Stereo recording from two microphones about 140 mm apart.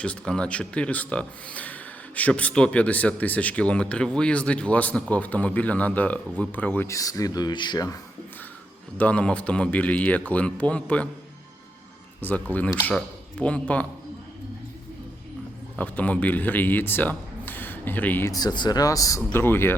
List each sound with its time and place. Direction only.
0.0 s speech: 5° left (ahead or behind); by 7.9 s 30° left (ahead or behind)
9.0 s speech: 10° left (ahead or behind)
12.2 s speech: 10° left (ahead or behind)
15.8 s speech: 10° left (ahead or behind)
18.3 s speech: 30° left (ahead or behind)